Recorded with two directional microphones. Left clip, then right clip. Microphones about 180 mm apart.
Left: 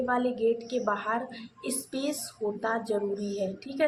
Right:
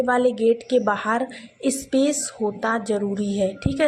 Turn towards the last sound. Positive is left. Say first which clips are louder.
# right 7 dB
turn(degrees=-40)  # may be behind; listen again after turning